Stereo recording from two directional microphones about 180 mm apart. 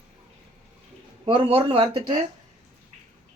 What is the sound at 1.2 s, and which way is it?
Speech, 30° right (ahead or behind).